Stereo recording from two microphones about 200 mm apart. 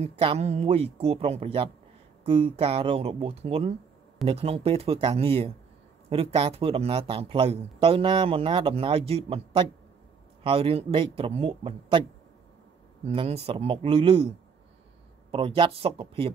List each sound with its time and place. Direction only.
0.0 s a man's voice: 30° right (ahead or behind)
13.0 s a man's voice: 30° right (ahead or behind)
15.3 s a man's voice: 25° right (ahead or behind)